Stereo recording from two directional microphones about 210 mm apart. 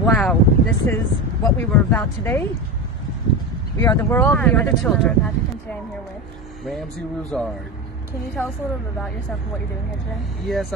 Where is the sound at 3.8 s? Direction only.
10° left (ahead or behind).